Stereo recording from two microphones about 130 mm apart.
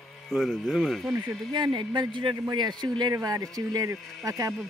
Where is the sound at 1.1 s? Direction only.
35° right (ahead or behind).